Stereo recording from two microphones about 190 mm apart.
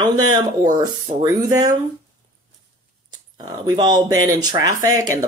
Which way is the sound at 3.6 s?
20° right (ahead or behind).